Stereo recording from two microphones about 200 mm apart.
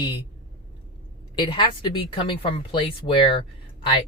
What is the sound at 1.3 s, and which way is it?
A woman's voice, 25° left (ahead or behind).